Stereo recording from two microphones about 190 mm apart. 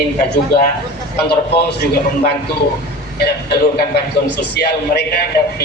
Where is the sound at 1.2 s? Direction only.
60° left (ahead or behind).